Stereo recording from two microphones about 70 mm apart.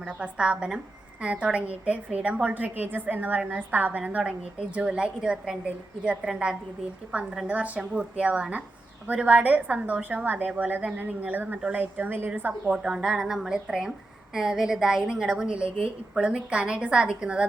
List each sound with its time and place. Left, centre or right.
0.0 s a woman's voice: centre
12.7 s a woman's voice: centre